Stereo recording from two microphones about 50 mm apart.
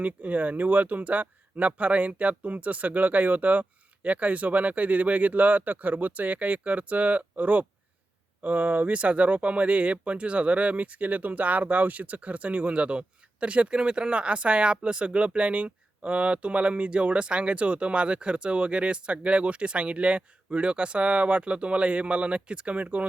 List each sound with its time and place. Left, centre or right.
0.0 s speech: right